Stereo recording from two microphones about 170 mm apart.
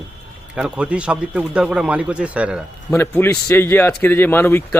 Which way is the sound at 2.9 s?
15° left (ahead or behind).